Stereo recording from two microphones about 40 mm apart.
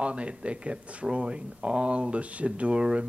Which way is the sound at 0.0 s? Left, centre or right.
Right.